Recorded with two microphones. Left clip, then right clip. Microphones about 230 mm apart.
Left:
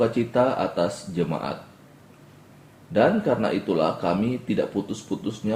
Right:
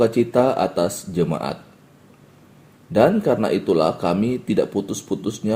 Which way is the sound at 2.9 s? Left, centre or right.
Right.